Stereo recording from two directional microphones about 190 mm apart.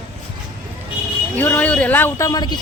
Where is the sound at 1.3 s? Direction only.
10° left (ahead or behind).